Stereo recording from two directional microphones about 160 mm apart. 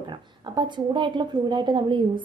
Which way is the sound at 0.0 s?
25° right (ahead or behind).